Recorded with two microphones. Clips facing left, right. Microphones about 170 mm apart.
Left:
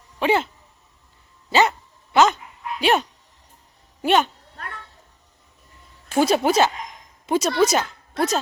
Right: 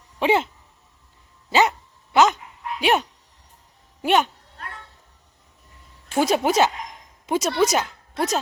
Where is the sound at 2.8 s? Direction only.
15° right (ahead or behind).